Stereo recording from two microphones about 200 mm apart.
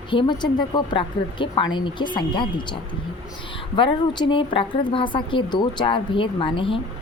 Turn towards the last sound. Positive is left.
turn(degrees=25)  # may be behind; listen again after turning